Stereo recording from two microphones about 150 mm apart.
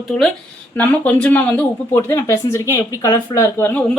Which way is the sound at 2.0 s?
20° left (ahead or behind).